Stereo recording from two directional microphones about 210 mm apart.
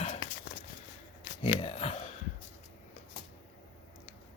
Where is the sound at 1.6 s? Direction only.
30° left (ahead or behind).